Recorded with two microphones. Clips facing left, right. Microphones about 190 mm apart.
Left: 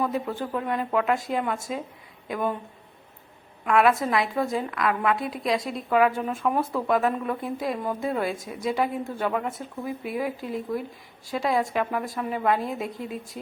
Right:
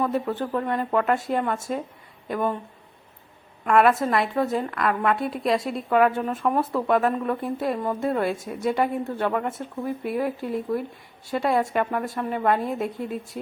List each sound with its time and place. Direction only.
0.3 s a woman's voice: 5° left (ahead or behind)
1.5 s speech: 5° right (ahead or behind)
2.2 s a woman's voice: 5° left (ahead or behind)
3.7 s a woman's voice: centre (ahead or behind)
13.0 s speech: 45° right (ahead or behind)